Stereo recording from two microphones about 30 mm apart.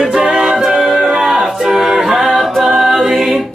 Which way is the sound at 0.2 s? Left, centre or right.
Right.